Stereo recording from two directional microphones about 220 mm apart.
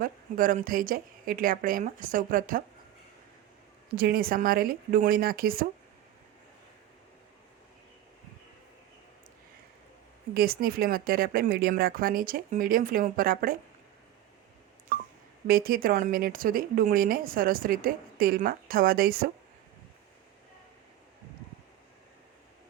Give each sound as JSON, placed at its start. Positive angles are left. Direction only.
{"t": 0.0, "sound": "speech", "side_deg": -40}
{"t": 3.9, "sound": "speech", "side_deg": -40}
{"t": 10.3, "sound": "speech", "side_deg": -40}
{"t": 15.4, "sound": "speech", "side_deg": -40}